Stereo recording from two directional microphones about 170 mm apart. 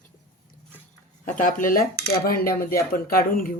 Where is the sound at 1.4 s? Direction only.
50° left (ahead or behind).